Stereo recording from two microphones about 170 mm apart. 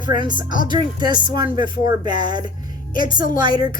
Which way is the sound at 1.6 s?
55° left (ahead or behind).